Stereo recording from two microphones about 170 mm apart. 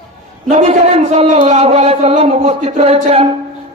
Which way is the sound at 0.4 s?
40° right (ahead or behind).